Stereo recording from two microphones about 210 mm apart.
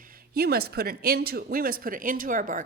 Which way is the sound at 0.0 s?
45° right (ahead or behind).